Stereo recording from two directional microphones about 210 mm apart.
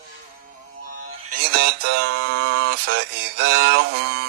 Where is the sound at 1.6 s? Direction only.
50° right (ahead or behind).